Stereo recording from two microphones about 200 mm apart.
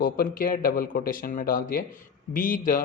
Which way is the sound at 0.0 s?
45° left (ahead or behind).